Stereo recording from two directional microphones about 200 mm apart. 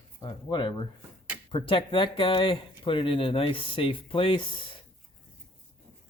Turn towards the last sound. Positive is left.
turn(degrees=25)  # may be behind; listen again after turning